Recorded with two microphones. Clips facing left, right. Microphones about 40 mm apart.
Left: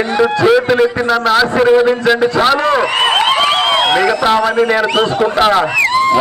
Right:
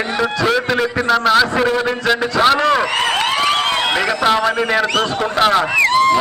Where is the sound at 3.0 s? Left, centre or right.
Centre.